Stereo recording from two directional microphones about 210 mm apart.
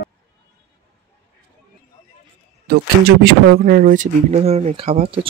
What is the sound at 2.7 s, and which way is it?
Speech, 50° right (ahead or behind).